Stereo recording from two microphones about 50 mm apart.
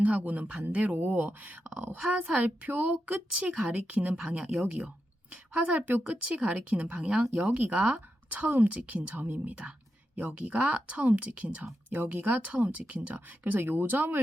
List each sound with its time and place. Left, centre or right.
0.0 s speech: right
1.6 s speech: right
2.4 s speech: right
3.5 s speech: centre
3.9 s speech: right
4.4 s a woman's voice: centre
13.6 s speech: right